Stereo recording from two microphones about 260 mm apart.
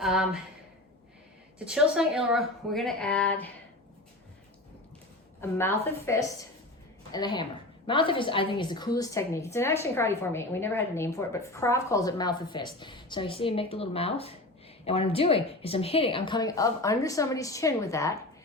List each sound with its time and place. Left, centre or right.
0.0 s a sound: centre
1.5 s a woman's voice: centre
5.4 s a woman's voice: centre